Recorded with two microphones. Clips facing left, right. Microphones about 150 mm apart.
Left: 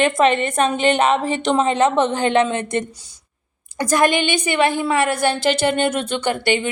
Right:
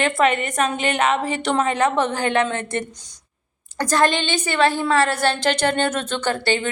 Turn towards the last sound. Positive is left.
turn(degrees=15)  # may be behind; listen again after turning